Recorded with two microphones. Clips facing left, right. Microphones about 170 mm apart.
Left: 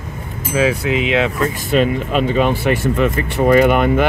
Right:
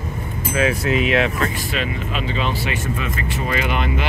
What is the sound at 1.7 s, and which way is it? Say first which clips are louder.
Speech: left 9 dB; 50° left (ahead or behind).